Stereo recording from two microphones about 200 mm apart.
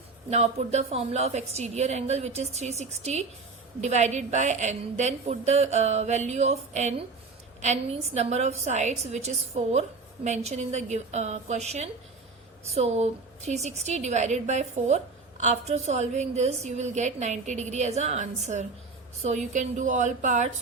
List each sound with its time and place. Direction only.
0.3 s a woman's voice: 35° right (ahead or behind)